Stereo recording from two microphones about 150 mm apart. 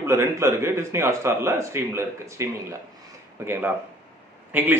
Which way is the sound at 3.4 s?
15° right (ahead or behind).